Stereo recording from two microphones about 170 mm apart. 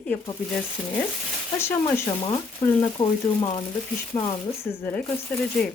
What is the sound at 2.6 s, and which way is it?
Speech, 25° left (ahead or behind).